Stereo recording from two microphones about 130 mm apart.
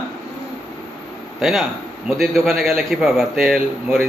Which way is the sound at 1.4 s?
5° right (ahead or behind).